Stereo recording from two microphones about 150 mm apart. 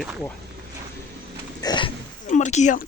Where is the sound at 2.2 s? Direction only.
55° left (ahead or behind).